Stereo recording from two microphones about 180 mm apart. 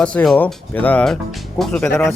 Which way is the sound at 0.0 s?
5° left (ahead or behind).